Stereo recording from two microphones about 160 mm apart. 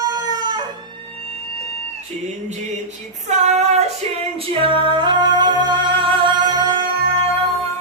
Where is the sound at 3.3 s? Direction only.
45° right (ahead or behind).